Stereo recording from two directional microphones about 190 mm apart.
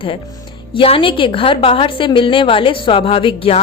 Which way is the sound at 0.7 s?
30° left (ahead or behind).